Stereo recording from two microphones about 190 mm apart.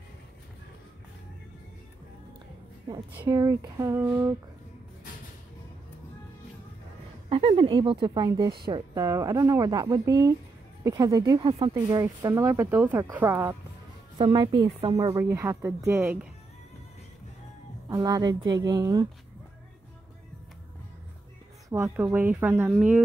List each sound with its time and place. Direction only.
3.2 s speech: 15° right (ahead or behind)
7.2 s speech: 30° right (ahead or behind); by 13.6 s 15° right (ahead or behind)
14.1 s speech: 25° right (ahead or behind)
15.0 s speech: 15° right (ahead or behind)
17.8 s speech: 20° right (ahead or behind)
21.6 s speech: 15° right (ahead or behind)